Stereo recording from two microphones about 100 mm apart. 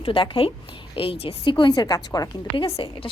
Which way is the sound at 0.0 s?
65° left (ahead or behind).